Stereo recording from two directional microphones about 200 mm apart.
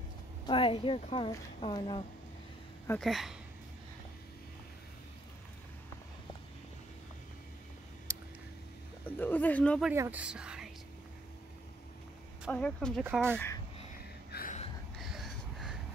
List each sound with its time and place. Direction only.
0.5 s a woman's voice: 25° left (ahead or behind)
2.9 s speech: centre (ahead or behind)
8.1 s a sound: 15° right (ahead or behind)
9.2 s speech: 10° left (ahead or behind)
9.8 s speech: 5° right (ahead or behind)
12.4 s speech: 5° left (ahead or behind)
13.0 s speech: 10° right (ahead or behind)
14.3 s a sound: 45° left (ahead or behind)
15.0 s a sound: centre (ahead or behind)